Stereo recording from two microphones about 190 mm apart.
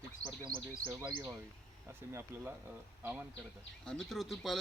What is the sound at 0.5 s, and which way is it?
Speech, 50° right (ahead or behind).